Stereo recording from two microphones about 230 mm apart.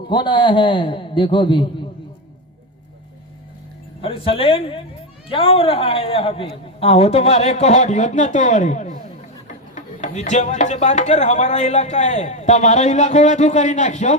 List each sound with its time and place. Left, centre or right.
0.1 s a man's voice: left
4.0 s a man's voice: left